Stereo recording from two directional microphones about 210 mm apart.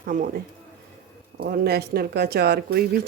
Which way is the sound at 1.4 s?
50° right (ahead or behind).